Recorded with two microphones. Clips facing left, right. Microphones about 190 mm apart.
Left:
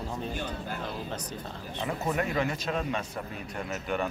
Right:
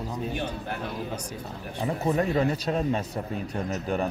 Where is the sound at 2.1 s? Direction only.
35° right (ahead or behind).